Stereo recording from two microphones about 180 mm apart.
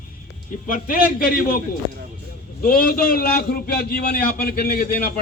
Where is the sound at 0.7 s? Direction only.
50° left (ahead or behind).